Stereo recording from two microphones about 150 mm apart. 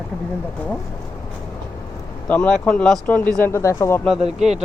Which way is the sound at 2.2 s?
10° left (ahead or behind).